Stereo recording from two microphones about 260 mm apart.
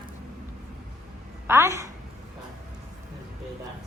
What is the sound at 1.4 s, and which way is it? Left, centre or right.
Speech, centre.